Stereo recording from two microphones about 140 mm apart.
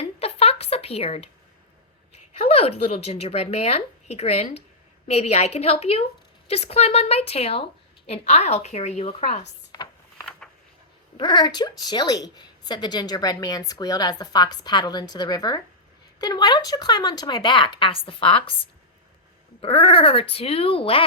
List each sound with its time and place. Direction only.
0.0 s a sound: 45° left (ahead or behind)
2.4 s a woman's voice: 45° left (ahead or behind)
11.2 s a woman's voice: 30° left (ahead or behind)